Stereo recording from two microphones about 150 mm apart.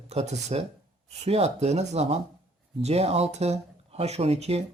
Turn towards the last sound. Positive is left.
turn(degrees=-45)  # may be behind; listen again after turning